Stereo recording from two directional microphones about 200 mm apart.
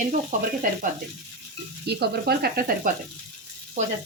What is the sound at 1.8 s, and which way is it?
Speech, 55° right (ahead or behind).